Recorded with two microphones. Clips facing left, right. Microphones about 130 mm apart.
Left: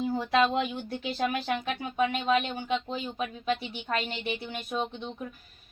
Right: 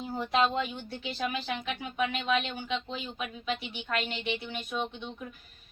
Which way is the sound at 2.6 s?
45° left (ahead or behind).